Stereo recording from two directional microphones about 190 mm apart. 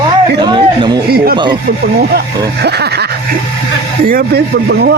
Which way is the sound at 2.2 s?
60° right (ahead or behind).